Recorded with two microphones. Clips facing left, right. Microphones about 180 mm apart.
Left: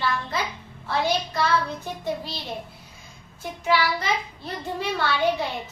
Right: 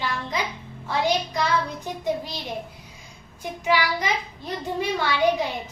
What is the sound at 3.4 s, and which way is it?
A child's voice, 15° right (ahead or behind).